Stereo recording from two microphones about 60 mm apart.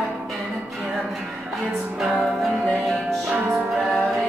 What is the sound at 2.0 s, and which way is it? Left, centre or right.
Music, centre.